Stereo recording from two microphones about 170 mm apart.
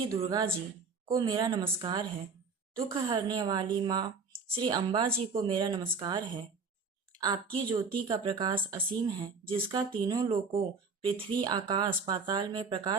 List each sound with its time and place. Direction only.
0.3 s speech: 25° right (ahead or behind)